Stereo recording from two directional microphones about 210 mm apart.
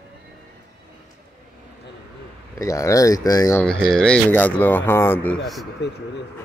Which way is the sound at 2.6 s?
15° left (ahead or behind).